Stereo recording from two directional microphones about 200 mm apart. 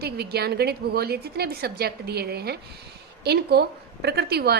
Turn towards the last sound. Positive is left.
turn(degrees=-55)  # may be behind; listen again after turning